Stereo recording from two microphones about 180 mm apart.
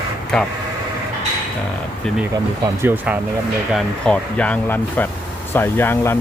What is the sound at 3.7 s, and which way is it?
Speech, 5° left (ahead or behind).